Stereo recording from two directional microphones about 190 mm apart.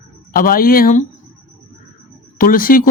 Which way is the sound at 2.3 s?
50° left (ahead or behind).